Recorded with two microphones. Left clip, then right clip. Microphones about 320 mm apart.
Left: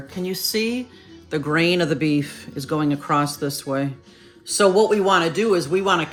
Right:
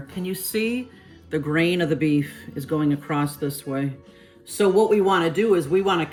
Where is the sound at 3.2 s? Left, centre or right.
Left.